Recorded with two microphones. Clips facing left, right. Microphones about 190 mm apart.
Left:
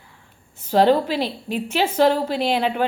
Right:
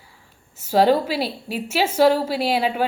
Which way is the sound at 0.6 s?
10° right (ahead or behind).